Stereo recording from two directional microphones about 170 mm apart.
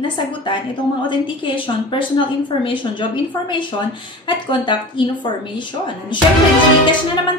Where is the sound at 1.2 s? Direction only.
30° left (ahead or behind).